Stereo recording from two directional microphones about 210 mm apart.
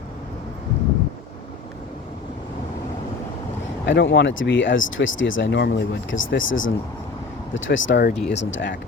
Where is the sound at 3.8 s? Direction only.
55° left (ahead or behind).